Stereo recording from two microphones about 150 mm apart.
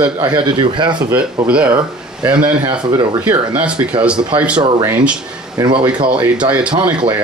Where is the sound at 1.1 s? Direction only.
10° right (ahead or behind).